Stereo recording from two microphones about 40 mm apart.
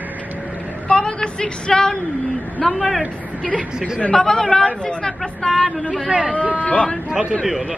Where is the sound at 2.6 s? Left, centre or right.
Centre.